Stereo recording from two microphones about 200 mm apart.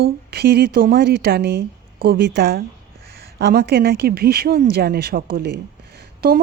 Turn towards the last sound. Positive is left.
turn(degrees=-50)  # may be behind; listen again after turning